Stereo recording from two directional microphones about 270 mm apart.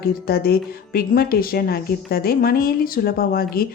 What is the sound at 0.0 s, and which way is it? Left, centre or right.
A woman's voice, left.